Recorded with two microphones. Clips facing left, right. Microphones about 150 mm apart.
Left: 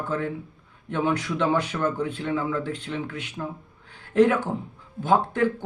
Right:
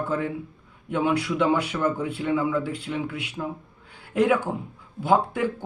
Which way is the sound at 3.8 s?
10° right (ahead or behind).